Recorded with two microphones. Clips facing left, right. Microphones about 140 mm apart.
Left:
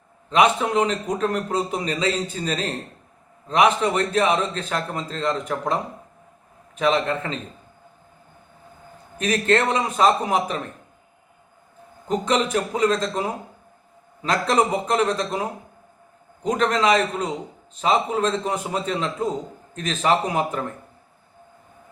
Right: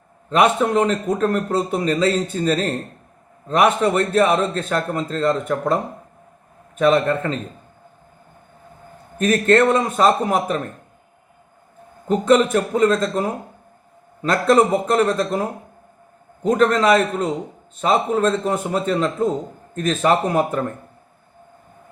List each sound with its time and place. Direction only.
0.3 s a man's voice: 45° right (ahead or behind)
9.1 s a man's voice: 50° right (ahead or behind)
12.0 s a man's voice: 50° right (ahead or behind)